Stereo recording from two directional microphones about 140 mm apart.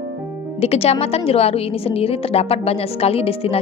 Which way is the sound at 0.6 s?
45° left (ahead or behind).